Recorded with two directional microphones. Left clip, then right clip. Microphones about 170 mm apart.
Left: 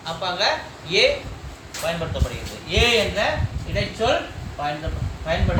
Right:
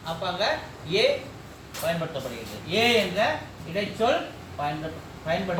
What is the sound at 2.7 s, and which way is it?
Speech, 10° left (ahead or behind).